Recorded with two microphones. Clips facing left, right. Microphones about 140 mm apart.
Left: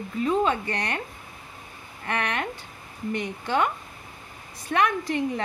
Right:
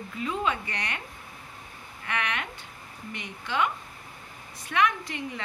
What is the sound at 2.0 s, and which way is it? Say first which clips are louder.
A woman's voice: left 4 dB; 40° left (ahead or behind).